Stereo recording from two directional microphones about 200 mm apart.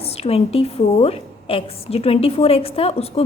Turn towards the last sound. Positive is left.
turn(degrees=30)  # may be behind; listen again after turning